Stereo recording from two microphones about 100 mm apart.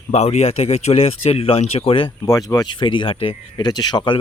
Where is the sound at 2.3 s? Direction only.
35° left (ahead or behind).